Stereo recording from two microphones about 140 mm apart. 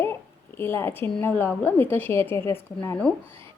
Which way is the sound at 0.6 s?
15° left (ahead or behind).